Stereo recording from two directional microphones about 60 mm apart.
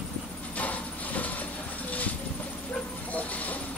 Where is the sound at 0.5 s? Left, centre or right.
Left.